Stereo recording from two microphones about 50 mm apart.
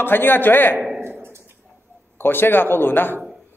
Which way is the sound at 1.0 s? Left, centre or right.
Right.